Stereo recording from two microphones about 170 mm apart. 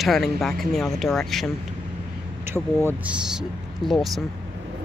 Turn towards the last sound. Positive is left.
turn(degrees=0)  # may be behind; listen again after turning